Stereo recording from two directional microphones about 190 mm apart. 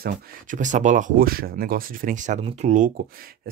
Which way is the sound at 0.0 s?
50° right (ahead or behind).